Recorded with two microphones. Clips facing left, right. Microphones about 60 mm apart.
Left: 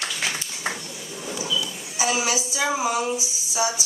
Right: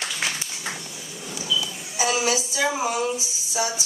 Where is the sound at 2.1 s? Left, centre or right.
Centre.